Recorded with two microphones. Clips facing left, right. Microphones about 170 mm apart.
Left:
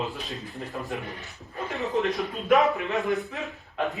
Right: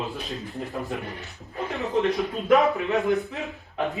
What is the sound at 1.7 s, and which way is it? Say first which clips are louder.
Speech: right 2 dB; centre (ahead or behind).